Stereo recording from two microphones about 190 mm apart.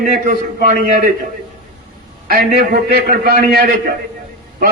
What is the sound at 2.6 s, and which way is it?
A man's voice, 50° right (ahead or behind).